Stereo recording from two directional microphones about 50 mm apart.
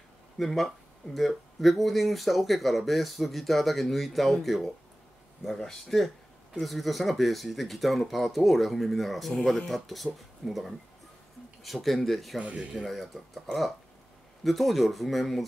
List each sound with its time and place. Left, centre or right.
0.4 s speech: centre
12.4 s speech: centre
12.7 s speech: centre
14.4 s speech: centre